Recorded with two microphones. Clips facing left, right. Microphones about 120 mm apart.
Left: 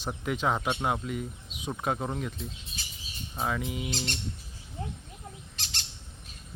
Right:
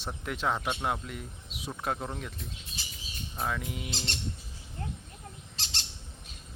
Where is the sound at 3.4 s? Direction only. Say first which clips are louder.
Left 3 dB; 5° left (ahead or behind).